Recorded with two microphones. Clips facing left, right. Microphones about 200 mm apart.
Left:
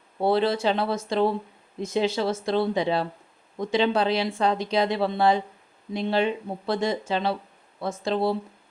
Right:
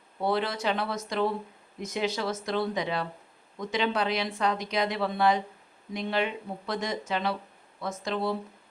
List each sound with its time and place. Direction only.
0.2 s speech: 30° left (ahead or behind)